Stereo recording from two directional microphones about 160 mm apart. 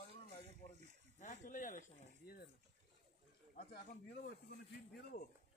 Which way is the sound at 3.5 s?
70° left (ahead or behind).